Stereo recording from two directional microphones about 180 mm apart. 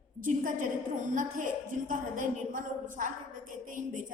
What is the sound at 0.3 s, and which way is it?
A woman's voice, 45° right (ahead or behind).